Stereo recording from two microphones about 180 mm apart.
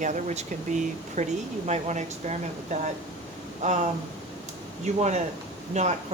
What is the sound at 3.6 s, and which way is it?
Speech, 40° right (ahead or behind).